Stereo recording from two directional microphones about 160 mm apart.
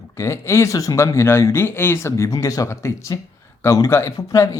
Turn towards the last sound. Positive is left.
turn(degrees=20)  # may be behind; listen again after turning